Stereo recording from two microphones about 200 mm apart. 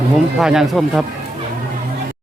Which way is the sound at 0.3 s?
Centre (ahead or behind).